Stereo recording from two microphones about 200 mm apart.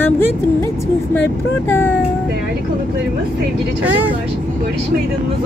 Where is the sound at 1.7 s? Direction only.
10° left (ahead or behind).